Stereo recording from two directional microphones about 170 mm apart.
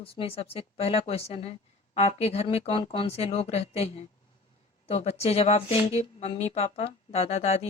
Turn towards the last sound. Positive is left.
turn(degrees=40)  # may be behind; listen again after turning